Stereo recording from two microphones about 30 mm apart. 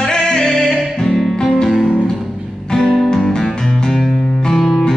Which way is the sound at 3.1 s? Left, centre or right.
Left.